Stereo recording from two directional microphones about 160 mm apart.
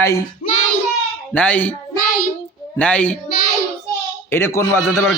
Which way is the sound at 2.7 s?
10° left (ahead or behind).